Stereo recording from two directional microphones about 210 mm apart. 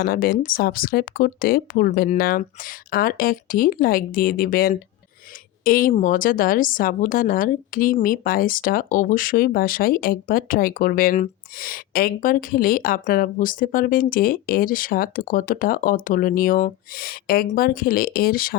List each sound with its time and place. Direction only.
0.0 s speech: 45° left (ahead or behind)